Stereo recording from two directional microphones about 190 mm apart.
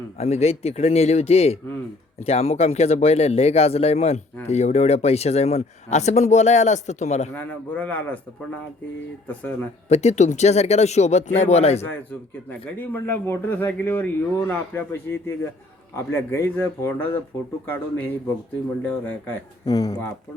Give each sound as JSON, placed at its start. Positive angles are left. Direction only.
{"t": 0.2, "sound": "a man's voice", "side_deg": 35}
{"t": 7.3, "sound": "a man's voice", "side_deg": 10}
{"t": 9.2, "sound": "a man's voice", "side_deg": 5}
{"t": 9.9, "sound": "a man's voice", "side_deg": 35}
{"t": 11.8, "sound": "a man's voice", "side_deg": 10}
{"t": 19.6, "sound": "speech", "side_deg": 20}